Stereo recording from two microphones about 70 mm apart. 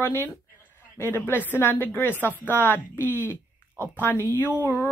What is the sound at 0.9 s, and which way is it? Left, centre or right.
Speech, left.